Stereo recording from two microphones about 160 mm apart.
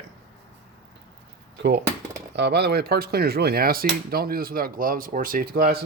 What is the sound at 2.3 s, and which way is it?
Speech, 90° right.